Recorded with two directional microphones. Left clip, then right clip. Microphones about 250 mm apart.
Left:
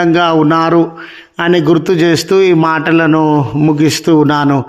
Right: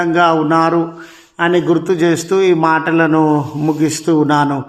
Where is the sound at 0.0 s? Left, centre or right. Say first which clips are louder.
Left 2 dB; left.